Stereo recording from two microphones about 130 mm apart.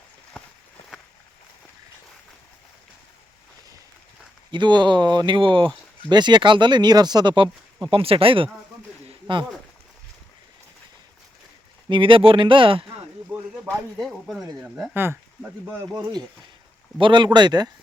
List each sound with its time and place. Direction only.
4.5 s speech: 35° right (ahead or behind)
11.9 s speech: 40° right (ahead or behind)
13.3 s a sound: 15° right (ahead or behind)
14.0 s speech: centre (ahead or behind)
14.6 s speech: 15° right (ahead or behind)
17.0 s speech: 35° right (ahead or behind)